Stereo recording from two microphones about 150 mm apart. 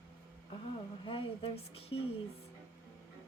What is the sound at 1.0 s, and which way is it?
A woman's voice, 35° left (ahead or behind).